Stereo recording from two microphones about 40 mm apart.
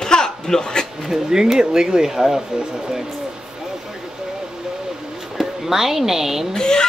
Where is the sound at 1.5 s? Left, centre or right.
Centre.